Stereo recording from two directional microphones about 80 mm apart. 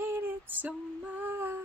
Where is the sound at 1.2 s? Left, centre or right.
Right.